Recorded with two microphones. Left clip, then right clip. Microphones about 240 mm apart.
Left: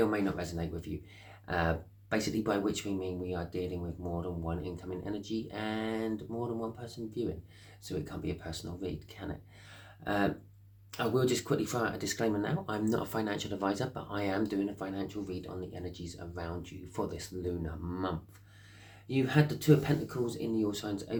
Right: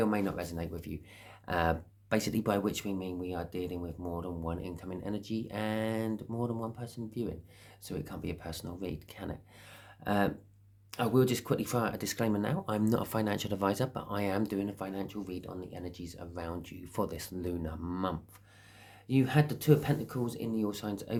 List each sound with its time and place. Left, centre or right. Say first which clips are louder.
0.0 s speech: left 1 dB; right